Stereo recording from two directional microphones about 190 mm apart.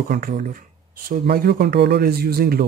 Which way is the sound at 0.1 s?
45° right (ahead or behind).